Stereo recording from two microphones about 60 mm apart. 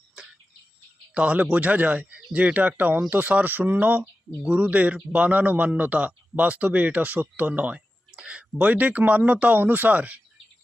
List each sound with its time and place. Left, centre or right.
1.1 s a man's voice: right